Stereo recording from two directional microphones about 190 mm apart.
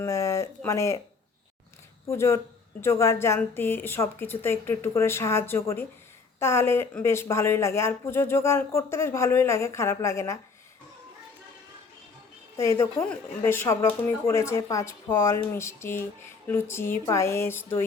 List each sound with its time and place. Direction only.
0.0 s speech: 15° left (ahead or behind)
2.0 s speech: 15° left (ahead or behind)
12.5 s speech: 15° left (ahead or behind)